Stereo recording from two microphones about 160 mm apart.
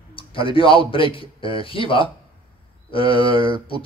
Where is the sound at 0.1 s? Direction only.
35° left (ahead or behind).